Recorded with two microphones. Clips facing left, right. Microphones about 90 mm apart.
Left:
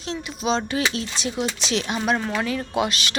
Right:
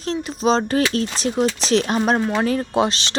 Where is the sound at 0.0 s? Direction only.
40° right (ahead or behind).